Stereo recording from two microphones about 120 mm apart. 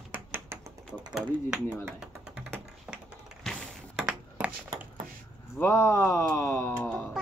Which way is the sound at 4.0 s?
10° right (ahead or behind).